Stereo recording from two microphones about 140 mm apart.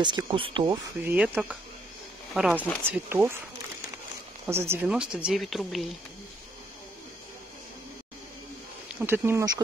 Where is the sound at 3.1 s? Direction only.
15° right (ahead or behind).